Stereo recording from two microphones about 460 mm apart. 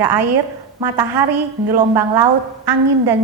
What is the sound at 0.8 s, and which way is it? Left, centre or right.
Speech, right.